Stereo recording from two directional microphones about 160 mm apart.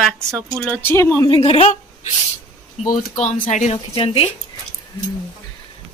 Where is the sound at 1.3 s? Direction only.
40° left (ahead or behind).